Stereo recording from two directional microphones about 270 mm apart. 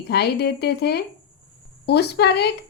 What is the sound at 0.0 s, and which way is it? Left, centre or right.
Speech, left.